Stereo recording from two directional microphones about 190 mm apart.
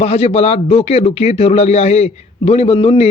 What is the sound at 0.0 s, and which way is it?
Speech, 35° left (ahead or behind).